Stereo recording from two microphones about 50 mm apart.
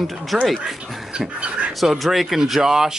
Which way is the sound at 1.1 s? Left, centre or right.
Right.